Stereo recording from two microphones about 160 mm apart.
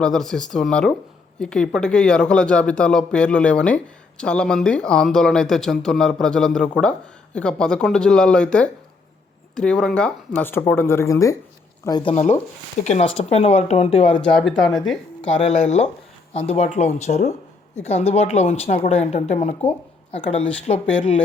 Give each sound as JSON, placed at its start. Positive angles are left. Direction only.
{"t": 0.0, "sound": "speech", "side_deg": 5}
{"t": 12.1, "sound": "speech", "side_deg": 45}
{"t": 14.2, "sound": "speech", "side_deg": 5}
{"t": 15.4, "sound": "speech", "side_deg": 45}